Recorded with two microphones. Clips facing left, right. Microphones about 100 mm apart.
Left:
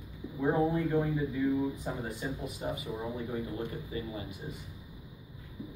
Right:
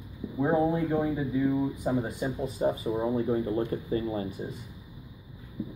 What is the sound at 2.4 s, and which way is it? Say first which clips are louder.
Speech: right 9 dB; 35° right (ahead or behind).